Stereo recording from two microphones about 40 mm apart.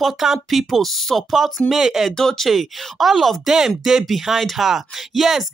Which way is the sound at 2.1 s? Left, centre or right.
Centre.